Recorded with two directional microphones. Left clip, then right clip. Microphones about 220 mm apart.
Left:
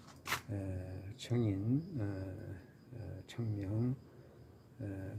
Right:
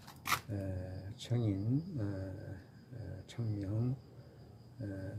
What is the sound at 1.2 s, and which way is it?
Speech, 15° left (ahead or behind).